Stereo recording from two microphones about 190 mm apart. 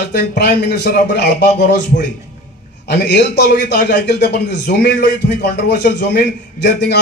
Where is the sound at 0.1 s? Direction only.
60° left (ahead or behind).